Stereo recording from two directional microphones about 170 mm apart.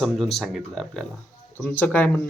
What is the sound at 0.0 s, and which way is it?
Speech, centre (ahead or behind).